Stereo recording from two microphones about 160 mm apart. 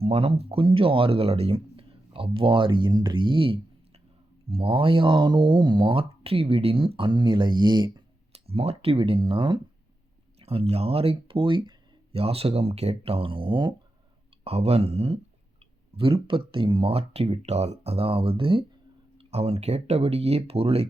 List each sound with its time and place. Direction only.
0.0 s speech: 35° right (ahead or behind)